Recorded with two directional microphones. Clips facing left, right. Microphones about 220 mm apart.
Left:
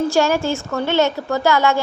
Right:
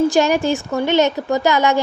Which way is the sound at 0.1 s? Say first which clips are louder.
Right 2 dB; 15° right (ahead or behind).